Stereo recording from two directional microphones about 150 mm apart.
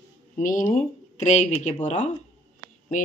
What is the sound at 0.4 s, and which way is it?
Speech, 65° left (ahead or behind).